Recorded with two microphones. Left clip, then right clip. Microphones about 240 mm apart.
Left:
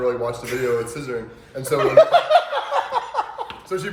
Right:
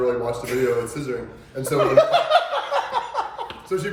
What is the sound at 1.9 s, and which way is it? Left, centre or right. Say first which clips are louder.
Laughter: left 4 dB; left.